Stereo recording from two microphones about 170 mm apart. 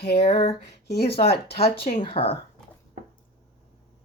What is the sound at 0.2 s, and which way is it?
Speech, 35° left (ahead or behind).